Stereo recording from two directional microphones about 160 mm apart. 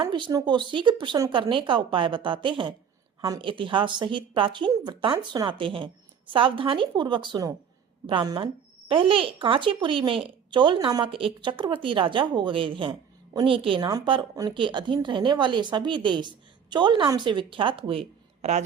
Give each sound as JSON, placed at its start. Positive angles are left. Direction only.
{"t": 0.0, "sound": "a woman's voice", "side_deg": -30}
{"t": 18.4, "sound": "a man's voice", "side_deg": -45}